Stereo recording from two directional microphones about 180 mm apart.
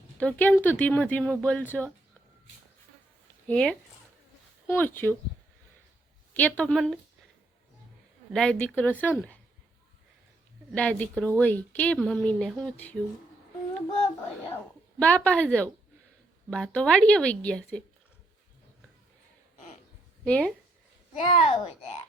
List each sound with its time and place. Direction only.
0.2 s speech: 10° left (ahead or behind)
3.4 s speech: 5° left (ahead or behind)
6.3 s speech: 10° left (ahead or behind)
8.3 s speech: 5° left (ahead or behind)
10.7 s speech: 5° left (ahead or behind)
15.0 s speech: 10° left (ahead or behind)
20.2 s speech: 5° left (ahead or behind)
21.2 s a child's voice: 35° left (ahead or behind)